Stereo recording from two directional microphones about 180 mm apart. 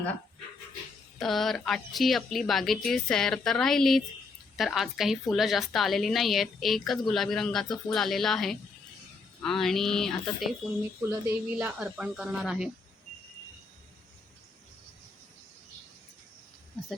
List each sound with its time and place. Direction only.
1.2 s speech: centre (ahead or behind)
16.8 s speech: centre (ahead or behind)